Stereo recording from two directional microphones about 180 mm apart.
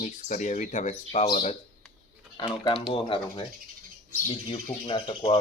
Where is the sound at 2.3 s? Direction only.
25° left (ahead or behind).